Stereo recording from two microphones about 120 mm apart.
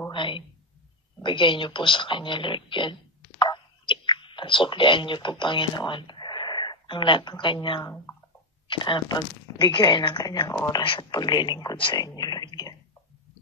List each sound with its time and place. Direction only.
0.1 s a sound: 45° left (ahead or behind)
1.2 s speech: 45° left (ahead or behind)
12.0 s whispering: 35° left (ahead or behind)